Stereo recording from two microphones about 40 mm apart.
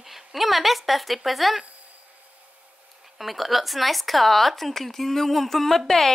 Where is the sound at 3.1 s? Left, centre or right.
Centre.